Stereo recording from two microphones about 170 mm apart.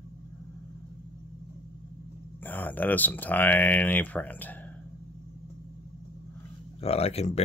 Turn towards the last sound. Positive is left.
turn(degrees=40)  # may be behind; listen again after turning